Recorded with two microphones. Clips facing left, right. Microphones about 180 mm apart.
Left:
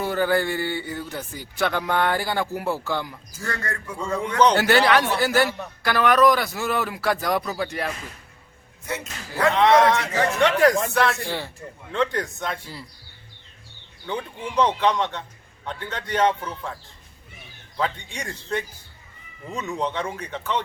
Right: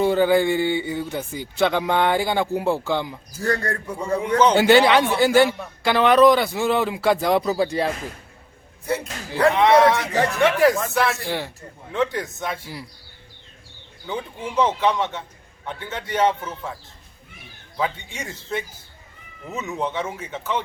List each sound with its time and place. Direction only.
0.0 s speech: 20° right (ahead or behind)
3.4 s speech: 35° right (ahead or behind)
3.9 s speech: 15° right (ahead or behind)
8.9 s speech: 35° right (ahead or behind)
9.5 s speech: 15° right (ahead or behind)
10.0 s speech: centre (ahead or behind)
14.1 s speech: 5° right (ahead or behind)
17.7 s speech: 10° right (ahead or behind)